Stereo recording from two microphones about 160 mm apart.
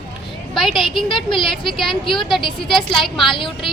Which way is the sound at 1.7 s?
Centre (ahead or behind).